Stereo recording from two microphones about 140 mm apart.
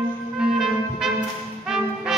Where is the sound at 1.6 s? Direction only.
5° right (ahead or behind).